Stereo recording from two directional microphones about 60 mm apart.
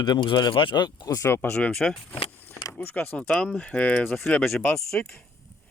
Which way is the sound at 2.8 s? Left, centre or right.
Left.